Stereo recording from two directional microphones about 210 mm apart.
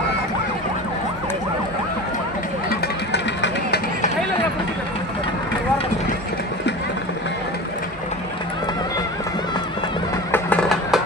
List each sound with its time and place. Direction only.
2.6 s vehicle: 50° left (ahead or behind)
10.3 s music: 5° left (ahead or behind)